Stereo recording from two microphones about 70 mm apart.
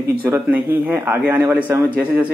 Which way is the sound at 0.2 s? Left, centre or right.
Right.